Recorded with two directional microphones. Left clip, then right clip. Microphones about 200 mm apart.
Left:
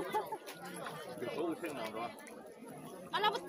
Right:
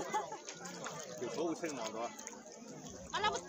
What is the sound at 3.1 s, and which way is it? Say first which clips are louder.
Speech: left 2 dB; 60° left (ahead or behind).